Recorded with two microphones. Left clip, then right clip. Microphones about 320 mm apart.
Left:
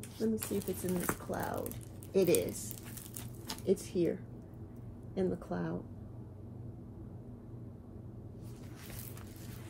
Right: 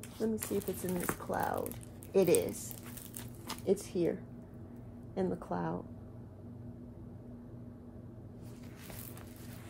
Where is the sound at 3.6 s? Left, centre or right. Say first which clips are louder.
Even; centre.